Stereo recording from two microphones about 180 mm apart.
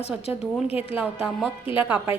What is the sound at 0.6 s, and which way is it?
Speech, 35° left (ahead or behind).